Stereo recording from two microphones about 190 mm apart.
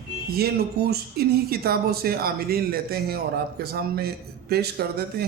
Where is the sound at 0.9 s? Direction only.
55° right (ahead or behind).